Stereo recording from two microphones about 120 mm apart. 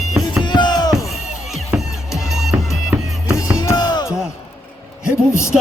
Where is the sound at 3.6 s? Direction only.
30° left (ahead or behind).